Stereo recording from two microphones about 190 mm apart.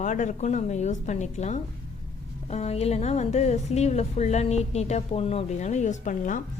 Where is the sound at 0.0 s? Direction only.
40° left (ahead or behind).